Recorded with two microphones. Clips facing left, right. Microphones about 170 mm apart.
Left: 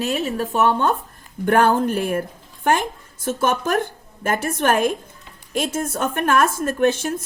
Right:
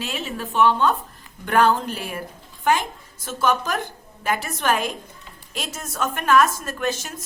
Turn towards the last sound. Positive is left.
turn(degrees=60)  # may be behind; listen again after turning